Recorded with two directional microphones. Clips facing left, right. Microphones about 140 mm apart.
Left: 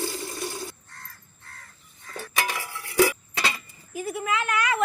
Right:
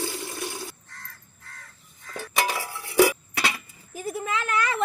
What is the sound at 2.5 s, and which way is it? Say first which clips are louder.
Dishes: right 2 dB; 20° right (ahead or behind).